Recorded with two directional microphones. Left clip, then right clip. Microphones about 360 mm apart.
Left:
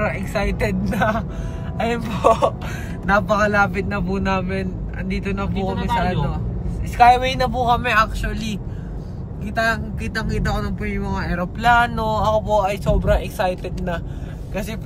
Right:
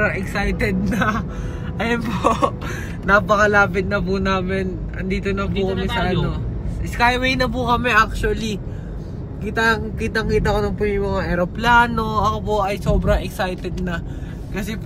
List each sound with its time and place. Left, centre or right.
0.1 s speech: centre
7.0 s speech: centre